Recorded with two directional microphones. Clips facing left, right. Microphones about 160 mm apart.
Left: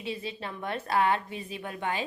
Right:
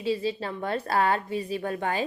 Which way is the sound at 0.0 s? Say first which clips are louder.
Right 8 dB; 35° right (ahead or behind).